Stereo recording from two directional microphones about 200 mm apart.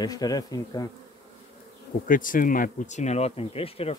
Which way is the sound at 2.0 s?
45° left (ahead or behind).